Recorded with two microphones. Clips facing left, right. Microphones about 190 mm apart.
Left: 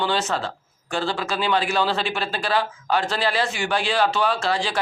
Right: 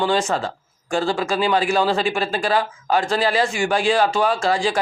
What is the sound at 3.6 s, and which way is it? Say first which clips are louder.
Speech: right 3 dB; 50° right (ahead or behind).